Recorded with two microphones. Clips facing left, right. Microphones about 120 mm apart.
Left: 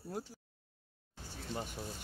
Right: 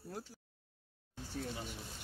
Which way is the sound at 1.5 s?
50° left (ahead or behind).